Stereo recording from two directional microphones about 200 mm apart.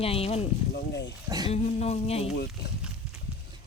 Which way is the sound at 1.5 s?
35° left (ahead or behind).